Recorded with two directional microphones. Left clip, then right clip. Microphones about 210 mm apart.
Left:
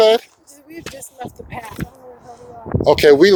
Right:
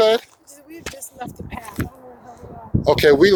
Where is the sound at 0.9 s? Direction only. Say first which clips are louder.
Left 2 dB; 5° left (ahead or behind).